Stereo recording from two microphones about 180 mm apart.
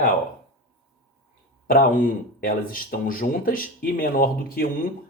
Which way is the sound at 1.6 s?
50° left (ahead or behind).